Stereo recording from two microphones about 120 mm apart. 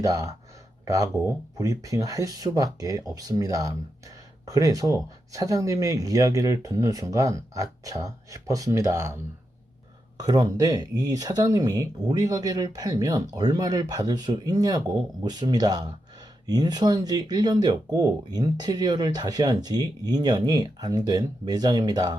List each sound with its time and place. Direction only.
0.0 s speech: 30° right (ahead or behind)